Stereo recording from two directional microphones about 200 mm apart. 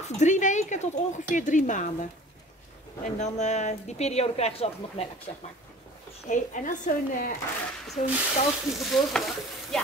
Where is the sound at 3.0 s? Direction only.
35° left (ahead or behind).